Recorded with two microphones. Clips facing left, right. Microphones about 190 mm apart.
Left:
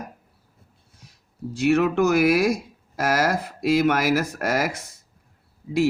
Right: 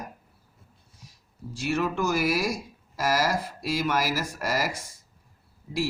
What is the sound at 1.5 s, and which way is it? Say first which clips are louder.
Speech: left 8 dB; 65° left (ahead or behind).